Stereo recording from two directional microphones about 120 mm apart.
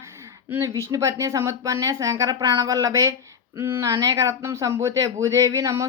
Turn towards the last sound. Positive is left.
turn(degrees=-30)  # may be behind; listen again after turning